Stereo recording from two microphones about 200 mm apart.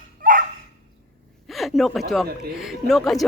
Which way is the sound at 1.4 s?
Centre (ahead or behind).